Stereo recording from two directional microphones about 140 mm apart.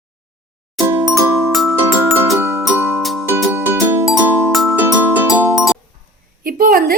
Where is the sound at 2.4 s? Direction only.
20° right (ahead or behind).